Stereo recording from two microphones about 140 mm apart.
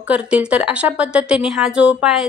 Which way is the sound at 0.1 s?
10° right (ahead or behind).